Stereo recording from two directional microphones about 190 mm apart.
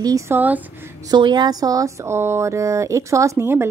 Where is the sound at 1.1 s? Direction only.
25° right (ahead or behind).